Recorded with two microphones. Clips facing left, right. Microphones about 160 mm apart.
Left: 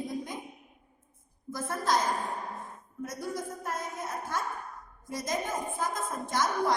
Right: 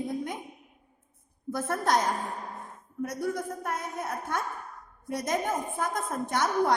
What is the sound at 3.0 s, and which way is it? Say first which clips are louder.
A woman's voice: right 5 dB; 60° right (ahead or behind).